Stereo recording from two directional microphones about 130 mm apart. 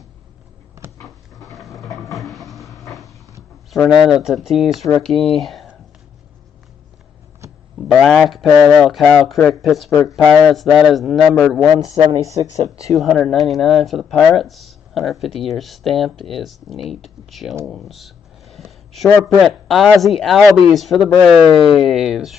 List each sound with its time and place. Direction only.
1.0 s a sound: centre (ahead or behind)
3.7 s speech: centre (ahead or behind)
7.9 s speech: centre (ahead or behind)
9.8 s speech: 20° left (ahead or behind)
10.1 s speech: centre (ahead or behind)
11.9 s speech: 55° right (ahead or behind)
12.9 s speech: centre (ahead or behind)
17.6 s a sound: centre (ahead or behind)
19.2 s speech: centre (ahead or behind)